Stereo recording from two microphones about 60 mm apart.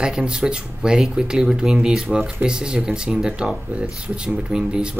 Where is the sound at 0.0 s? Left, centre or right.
Centre.